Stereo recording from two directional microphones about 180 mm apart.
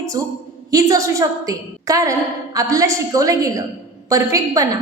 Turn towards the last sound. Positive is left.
turn(degrees=-20)  # may be behind; listen again after turning